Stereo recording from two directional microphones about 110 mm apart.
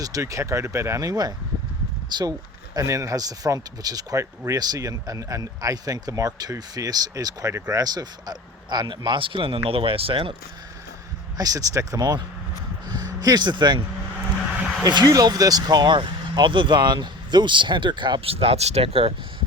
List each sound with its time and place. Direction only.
0.0 s speech: 30° right (ahead or behind)
2.7 s speech: 30° right (ahead or behind); by 10.3 s 55° right (ahead or behind)
11.3 s speech: 35° right (ahead or behind)
14.8 s speech: 35° right (ahead or behind); by 19.1 s 60° right (ahead or behind)